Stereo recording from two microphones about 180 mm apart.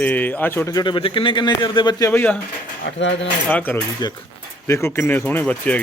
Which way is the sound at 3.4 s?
10° left (ahead or behind).